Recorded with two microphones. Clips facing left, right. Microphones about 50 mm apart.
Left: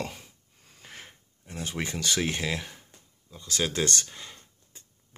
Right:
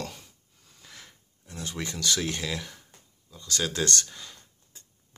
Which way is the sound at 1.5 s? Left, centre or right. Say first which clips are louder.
Left 2 dB; left.